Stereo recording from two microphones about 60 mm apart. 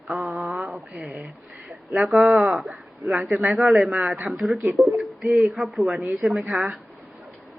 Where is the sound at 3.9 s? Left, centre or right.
Right.